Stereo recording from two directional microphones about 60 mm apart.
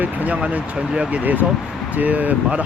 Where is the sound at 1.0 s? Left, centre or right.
Right.